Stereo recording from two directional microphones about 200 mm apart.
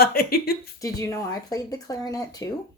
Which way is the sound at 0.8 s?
15° left (ahead or behind).